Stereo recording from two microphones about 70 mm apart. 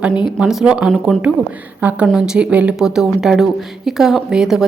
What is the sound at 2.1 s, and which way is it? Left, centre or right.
Speech, centre.